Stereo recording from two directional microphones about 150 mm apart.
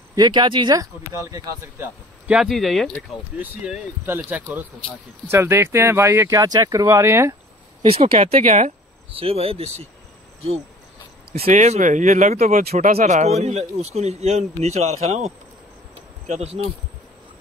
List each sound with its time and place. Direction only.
0.1 s speech: 30° right (ahead or behind)
2.2 s speech: 5° right (ahead or behind)
3.3 s speech: 10° right (ahead or behind)
7.9 s a man's voice: 45° right (ahead or behind)
11.4 s a man's voice: 50° right (ahead or behind)